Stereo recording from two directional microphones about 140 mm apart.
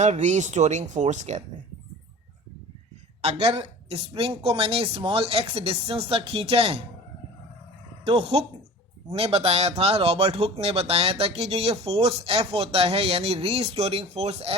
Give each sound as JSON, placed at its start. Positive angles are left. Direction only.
{"t": 0.0, "sound": "speech", "side_deg": -55}
{"t": 3.2, "sound": "a woman's voice", "side_deg": -45}
{"t": 8.0, "sound": "speech", "side_deg": -45}